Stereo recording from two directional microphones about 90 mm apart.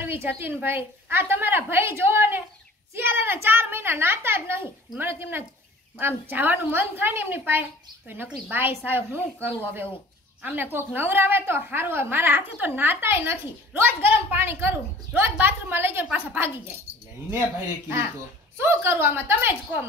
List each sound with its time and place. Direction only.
0.0 s a woman's voice: 25° right (ahead or behind)
18.6 s a woman's voice: 25° right (ahead or behind)